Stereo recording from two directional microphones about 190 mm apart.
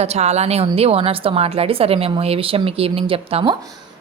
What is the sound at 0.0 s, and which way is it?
A woman's voice, 35° right (ahead or behind).